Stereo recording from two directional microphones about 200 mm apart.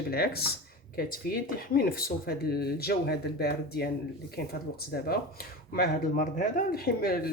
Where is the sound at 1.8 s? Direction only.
50° left (ahead or behind).